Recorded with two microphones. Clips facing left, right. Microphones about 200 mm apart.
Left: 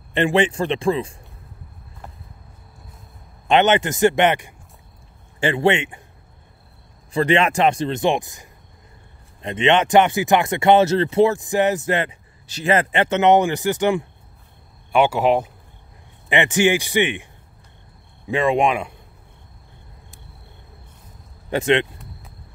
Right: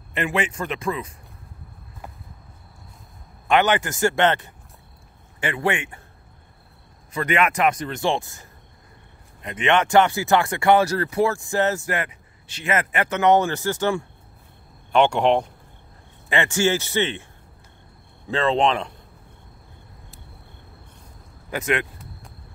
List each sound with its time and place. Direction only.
0.1 s speech: 30° left (ahead or behind)
3.4 s speech: 25° left (ahead or behind)
5.4 s speech: 30° left (ahead or behind)
7.1 s speech: 30° left (ahead or behind)
12.4 s speech: 35° left (ahead or behind); by 14.0 s 15° left (ahead or behind)
14.9 s a man's voice: 5° left (ahead or behind)
16.3 s a man's voice: 20° left (ahead or behind)
18.3 s a man's voice: 15° left (ahead or behind)
21.5 s speech: 30° left (ahead or behind)